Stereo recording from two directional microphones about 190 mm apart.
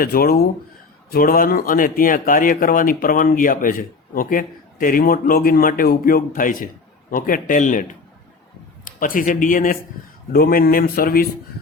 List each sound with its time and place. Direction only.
0.0 s speech: 50° left (ahead or behind)